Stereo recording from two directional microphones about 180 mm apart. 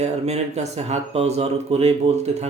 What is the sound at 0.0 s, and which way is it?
Speech, 40° right (ahead or behind).